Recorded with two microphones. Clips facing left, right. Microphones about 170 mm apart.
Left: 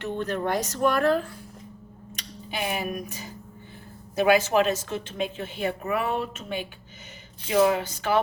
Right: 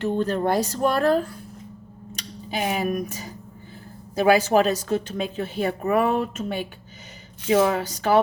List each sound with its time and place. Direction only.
0.0 s speech: 35° right (ahead or behind)
7.7 s speech: 40° right (ahead or behind)